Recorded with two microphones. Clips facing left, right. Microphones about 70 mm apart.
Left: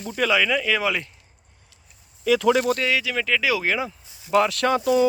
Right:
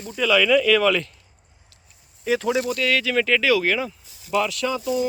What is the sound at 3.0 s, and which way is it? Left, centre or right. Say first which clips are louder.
Speech: right 3 dB; centre.